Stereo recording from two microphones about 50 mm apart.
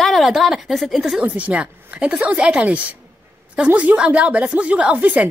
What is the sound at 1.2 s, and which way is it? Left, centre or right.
A woman's voice, right.